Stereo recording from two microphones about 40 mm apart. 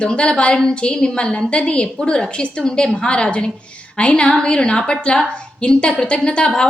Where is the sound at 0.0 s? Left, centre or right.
Left.